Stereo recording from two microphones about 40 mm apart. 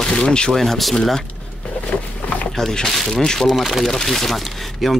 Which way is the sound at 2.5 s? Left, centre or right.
Centre.